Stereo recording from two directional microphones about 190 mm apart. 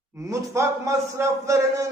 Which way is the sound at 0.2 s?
15° right (ahead or behind).